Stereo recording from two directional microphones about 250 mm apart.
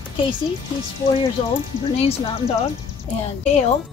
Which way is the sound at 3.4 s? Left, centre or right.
Left.